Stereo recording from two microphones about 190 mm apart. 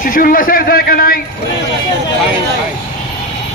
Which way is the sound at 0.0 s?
45° left (ahead or behind).